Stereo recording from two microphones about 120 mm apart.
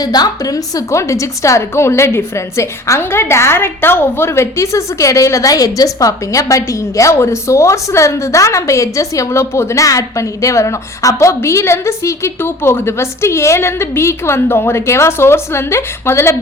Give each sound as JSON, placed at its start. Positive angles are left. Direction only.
{"t": 0.0, "sound": "a woman's voice", "side_deg": 30}